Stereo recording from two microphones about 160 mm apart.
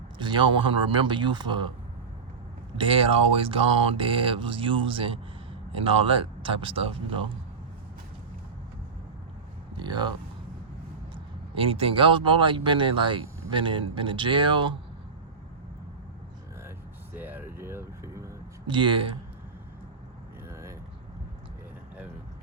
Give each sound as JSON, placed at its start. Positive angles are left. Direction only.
{"t": 0.2, "sound": "speech", "side_deg": -30}
{"t": 2.7, "sound": "speech", "side_deg": -35}
{"t": 9.7, "sound": "speech", "side_deg": -25}
{"t": 11.1, "sound": "speech", "side_deg": -35}
{"t": 17.2, "sound": "vehicle", "side_deg": -10}
{"t": 18.7, "sound": "speech", "side_deg": -30}
{"t": 20.5, "sound": "vehicle", "side_deg": -20}